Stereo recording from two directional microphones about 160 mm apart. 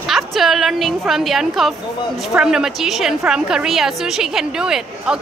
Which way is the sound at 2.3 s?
5° right (ahead or behind).